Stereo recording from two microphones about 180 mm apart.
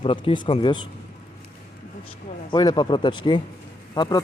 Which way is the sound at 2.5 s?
25° left (ahead or behind).